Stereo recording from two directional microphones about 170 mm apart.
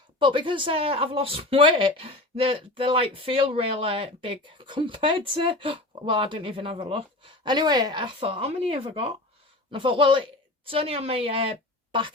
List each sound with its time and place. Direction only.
0.2 s speech: 30° right (ahead or behind)